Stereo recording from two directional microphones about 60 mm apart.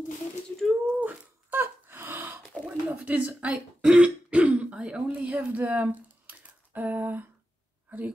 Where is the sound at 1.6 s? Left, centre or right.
Right.